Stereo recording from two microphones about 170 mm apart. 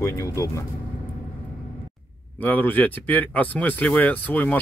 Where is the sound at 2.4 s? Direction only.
10° left (ahead or behind).